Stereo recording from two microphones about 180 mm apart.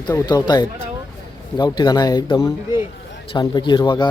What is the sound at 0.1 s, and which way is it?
Speech, 15° left (ahead or behind).